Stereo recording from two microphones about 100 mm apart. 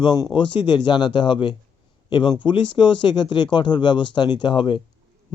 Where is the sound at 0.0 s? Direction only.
45° left (ahead or behind).